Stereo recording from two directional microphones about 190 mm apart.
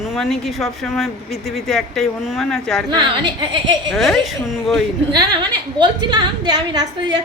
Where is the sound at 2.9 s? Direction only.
25° right (ahead or behind).